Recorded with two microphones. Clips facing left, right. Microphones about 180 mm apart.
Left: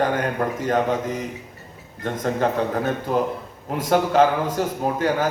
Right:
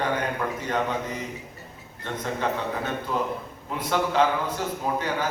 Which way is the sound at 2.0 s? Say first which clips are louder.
Left 6 dB; 45° left (ahead or behind).